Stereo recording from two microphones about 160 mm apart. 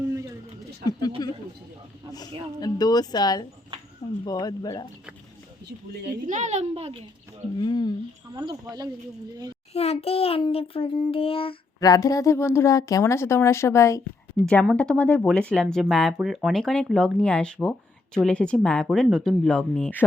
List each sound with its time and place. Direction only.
0.0 s a sound: 15° right (ahead or behind)
1.2 s speech: 25° left (ahead or behind)
2.6 s speech: 25° left (ahead or behind)
6.2 s a woman's voice: 50° right (ahead or behind)
7.6 s speech: 30° left (ahead or behind)
8.3 s speech: 30° right (ahead or behind)
9.7 s a child's voice: 40° left (ahead or behind)
11.8 s speech: 25° left (ahead or behind)
14.4 s speech: 5° left (ahead or behind)